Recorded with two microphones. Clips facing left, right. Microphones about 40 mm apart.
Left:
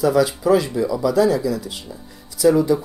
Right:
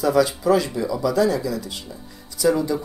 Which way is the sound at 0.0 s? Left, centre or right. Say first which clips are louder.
Left 2 dB; centre.